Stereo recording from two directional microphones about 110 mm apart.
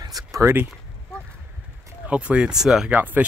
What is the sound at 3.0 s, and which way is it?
Speech, 15° right (ahead or behind).